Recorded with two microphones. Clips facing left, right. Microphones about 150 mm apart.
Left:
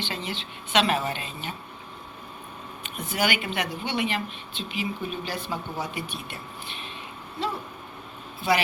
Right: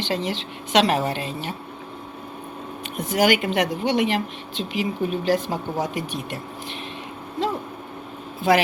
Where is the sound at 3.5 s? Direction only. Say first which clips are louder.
Right 8 dB; 90° right.